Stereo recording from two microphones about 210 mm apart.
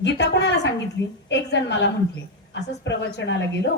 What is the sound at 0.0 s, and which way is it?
A woman's voice, 55° left (ahead or behind).